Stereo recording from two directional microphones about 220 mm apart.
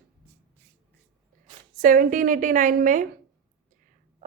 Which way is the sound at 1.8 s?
40° right (ahead or behind).